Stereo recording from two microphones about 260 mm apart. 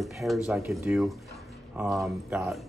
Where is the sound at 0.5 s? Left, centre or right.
Centre.